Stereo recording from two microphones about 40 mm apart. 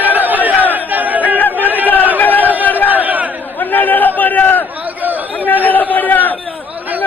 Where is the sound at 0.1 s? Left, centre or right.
Right.